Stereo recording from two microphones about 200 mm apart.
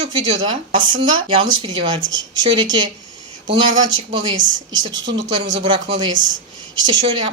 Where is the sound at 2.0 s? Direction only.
70° right (ahead or behind).